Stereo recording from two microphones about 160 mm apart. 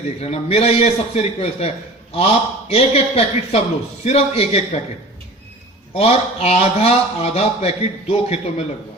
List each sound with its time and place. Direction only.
0.2 s a man's voice: 40° left (ahead or behind)
5.9 s a man's voice: 40° left (ahead or behind)